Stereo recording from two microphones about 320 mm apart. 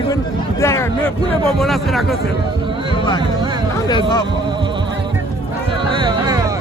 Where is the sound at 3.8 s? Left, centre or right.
Centre.